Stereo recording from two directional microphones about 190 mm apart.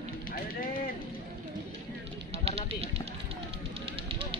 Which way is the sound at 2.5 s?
30° right (ahead or behind).